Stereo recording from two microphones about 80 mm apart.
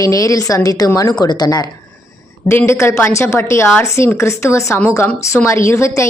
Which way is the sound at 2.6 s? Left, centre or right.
Left.